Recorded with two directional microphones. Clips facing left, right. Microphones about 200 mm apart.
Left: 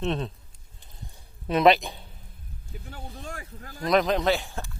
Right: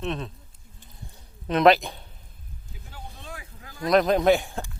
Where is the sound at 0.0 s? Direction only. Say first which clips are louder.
Left 2 dB; 30° left (ahead or behind).